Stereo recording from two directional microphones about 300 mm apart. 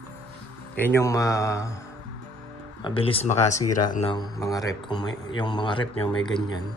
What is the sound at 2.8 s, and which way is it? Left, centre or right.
Speech, centre.